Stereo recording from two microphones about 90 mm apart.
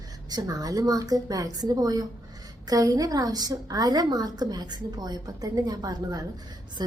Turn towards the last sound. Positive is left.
turn(degrees=-50)  # may be behind; listen again after turning